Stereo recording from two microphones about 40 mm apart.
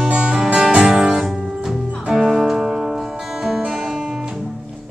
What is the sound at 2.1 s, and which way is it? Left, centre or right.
Music, centre.